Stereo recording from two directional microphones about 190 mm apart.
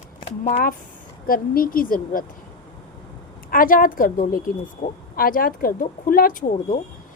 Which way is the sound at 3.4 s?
50° left (ahead or behind).